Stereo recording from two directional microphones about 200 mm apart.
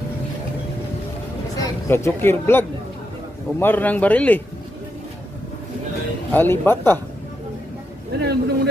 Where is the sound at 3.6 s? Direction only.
10° left (ahead or behind).